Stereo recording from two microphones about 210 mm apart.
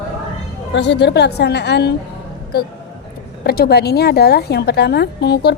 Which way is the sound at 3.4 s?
50° left (ahead or behind).